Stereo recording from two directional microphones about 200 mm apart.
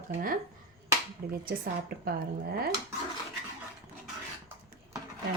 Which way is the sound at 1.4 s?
50° right (ahead or behind).